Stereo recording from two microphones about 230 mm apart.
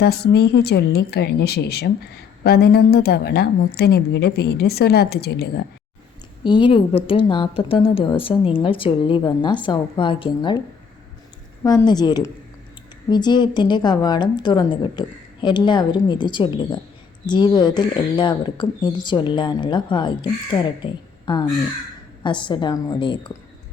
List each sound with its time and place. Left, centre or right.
0.0 s speech: left
6.4 s speech: left
11.6 s speech: centre